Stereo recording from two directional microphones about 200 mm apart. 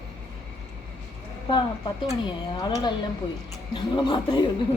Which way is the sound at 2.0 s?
25° left (ahead or behind).